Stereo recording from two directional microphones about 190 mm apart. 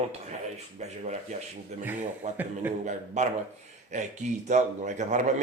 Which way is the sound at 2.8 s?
40° right (ahead or behind).